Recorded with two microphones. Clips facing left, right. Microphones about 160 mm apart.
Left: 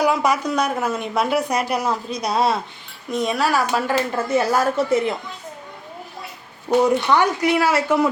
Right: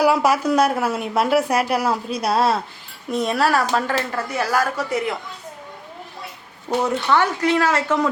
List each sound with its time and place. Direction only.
0.0 s a woman's voice: 5° right (ahead or behind); by 5.1 s 25° left (ahead or behind)
6.7 s a woman's voice: 15° left (ahead or behind)